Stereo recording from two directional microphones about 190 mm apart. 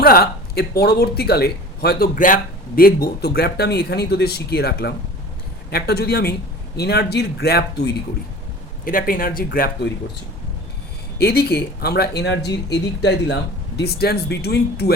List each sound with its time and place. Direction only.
0.0 s speech: 55° left (ahead or behind)
11.2 s speech: 55° left (ahead or behind)